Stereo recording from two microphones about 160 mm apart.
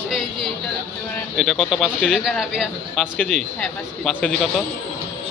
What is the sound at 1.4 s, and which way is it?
Speech, centre (ahead or behind).